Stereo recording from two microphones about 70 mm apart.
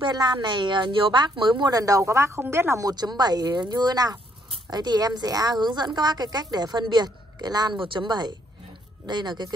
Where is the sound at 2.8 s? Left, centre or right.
Right.